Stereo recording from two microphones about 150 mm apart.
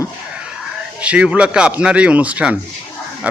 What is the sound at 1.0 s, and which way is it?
A man's voice, 10° right (ahead or behind).